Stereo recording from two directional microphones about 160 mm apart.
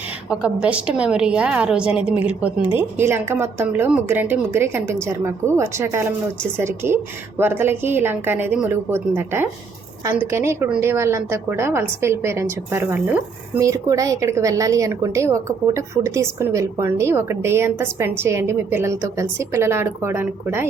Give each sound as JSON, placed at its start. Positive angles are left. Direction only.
{"t": 0.3, "sound": "a woman's voice", "side_deg": -5}